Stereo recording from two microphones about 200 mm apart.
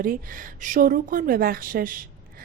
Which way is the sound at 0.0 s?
45° right (ahead or behind).